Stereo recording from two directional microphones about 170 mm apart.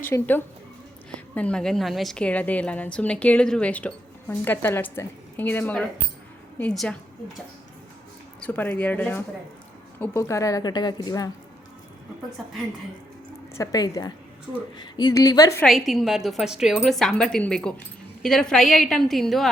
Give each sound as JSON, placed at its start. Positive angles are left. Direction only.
{"t": 0.0, "sound": "a woman's voice", "side_deg": 10}
{"t": 8.4, "sound": "a woman's voice", "side_deg": 10}
{"t": 12.4, "sound": "speech", "side_deg": 0}
{"t": 13.5, "sound": "a woman's voice", "side_deg": 20}
{"t": 15.9, "sound": "speech", "side_deg": 0}